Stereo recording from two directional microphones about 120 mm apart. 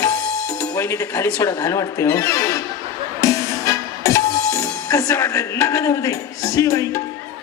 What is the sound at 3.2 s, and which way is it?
Music, 25° left (ahead or behind).